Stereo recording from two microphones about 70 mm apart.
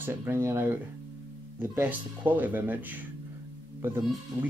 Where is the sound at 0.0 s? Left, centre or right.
Right.